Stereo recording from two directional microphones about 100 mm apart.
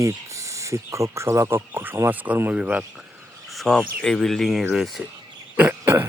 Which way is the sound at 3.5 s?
5° left (ahead or behind).